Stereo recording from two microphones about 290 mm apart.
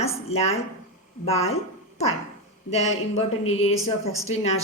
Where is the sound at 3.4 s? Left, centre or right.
Left.